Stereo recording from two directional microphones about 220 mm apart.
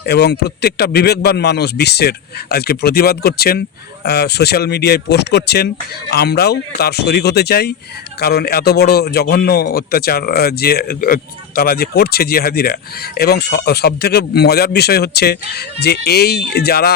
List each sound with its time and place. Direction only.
0.0 s a man's voice: 50° left (ahead or behind)